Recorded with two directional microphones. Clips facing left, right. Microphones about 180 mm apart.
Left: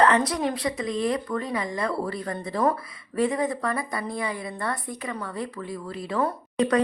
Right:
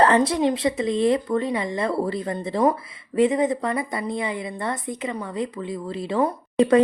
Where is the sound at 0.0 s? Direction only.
30° right (ahead or behind).